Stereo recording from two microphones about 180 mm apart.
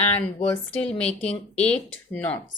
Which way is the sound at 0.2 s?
10° left (ahead or behind).